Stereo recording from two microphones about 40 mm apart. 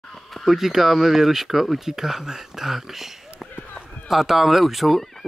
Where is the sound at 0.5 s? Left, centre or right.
Centre.